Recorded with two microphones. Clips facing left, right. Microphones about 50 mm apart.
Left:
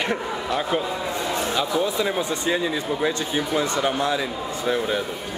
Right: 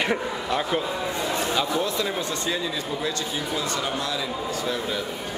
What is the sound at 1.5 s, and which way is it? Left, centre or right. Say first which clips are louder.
Speech: left 2 dB; centre.